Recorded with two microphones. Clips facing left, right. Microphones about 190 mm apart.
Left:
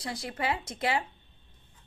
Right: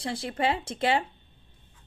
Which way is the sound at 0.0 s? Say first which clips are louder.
Right 5 dB; 30° right (ahead or behind).